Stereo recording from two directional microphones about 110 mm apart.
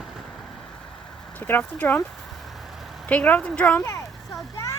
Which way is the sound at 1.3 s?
15° left (ahead or behind).